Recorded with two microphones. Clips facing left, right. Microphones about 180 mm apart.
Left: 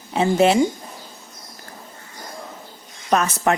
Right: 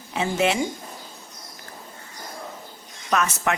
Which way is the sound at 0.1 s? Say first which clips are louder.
Left 6 dB; 35° left (ahead or behind).